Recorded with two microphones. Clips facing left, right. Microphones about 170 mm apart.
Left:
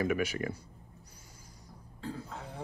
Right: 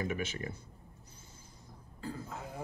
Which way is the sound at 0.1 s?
25° right (ahead or behind).